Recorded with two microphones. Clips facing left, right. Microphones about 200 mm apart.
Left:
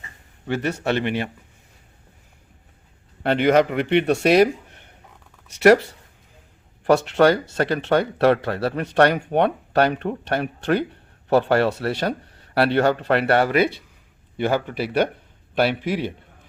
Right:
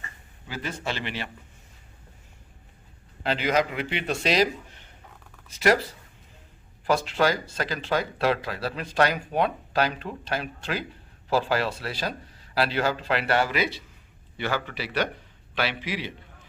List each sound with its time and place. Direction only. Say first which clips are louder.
0.4 s speech: left 9 dB; 70° left (ahead or behind); by 1.3 s 55° left (ahead or behind)
3.2 s speech: left 8 dB; 60° left (ahead or behind)
6.8 s a man's voice: left 7 dB; 65° left (ahead or behind)